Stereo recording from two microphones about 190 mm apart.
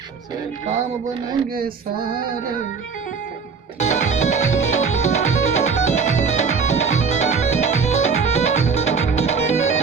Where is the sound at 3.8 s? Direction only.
35° left (ahead or behind).